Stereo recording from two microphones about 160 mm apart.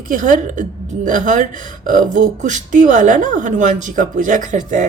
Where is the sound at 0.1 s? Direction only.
55° right (ahead or behind).